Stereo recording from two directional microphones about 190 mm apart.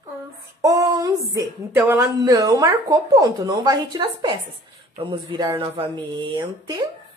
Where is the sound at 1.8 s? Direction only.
15° right (ahead or behind).